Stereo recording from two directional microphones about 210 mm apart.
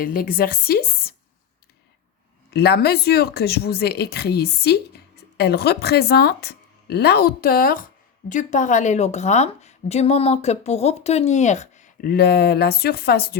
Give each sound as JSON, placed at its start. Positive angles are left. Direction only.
{"t": 0.0, "sound": "speech", "side_deg": 45}
{"t": 2.5, "sound": "a woman's voice", "side_deg": 50}